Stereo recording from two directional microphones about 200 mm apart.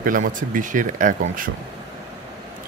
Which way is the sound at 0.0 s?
40° right (ahead or behind).